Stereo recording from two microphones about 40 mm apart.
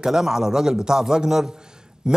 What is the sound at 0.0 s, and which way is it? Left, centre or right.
Speech, centre.